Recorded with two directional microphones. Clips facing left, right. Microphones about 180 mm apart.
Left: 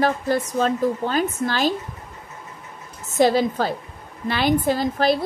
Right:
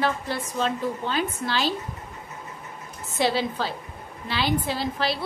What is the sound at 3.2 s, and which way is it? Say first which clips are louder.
A woman's voice: left 7 dB; 45° left (ahead or behind).